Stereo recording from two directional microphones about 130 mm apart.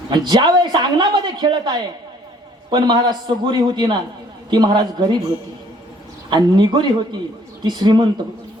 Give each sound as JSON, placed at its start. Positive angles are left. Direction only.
{"t": 0.1, "sound": "speech", "side_deg": -35}
{"t": 6.3, "sound": "speech", "side_deg": -35}